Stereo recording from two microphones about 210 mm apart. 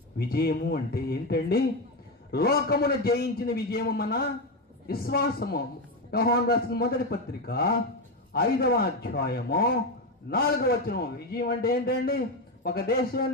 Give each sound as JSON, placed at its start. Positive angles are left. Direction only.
{"t": 0.2, "sound": "a man's voice", "side_deg": 45}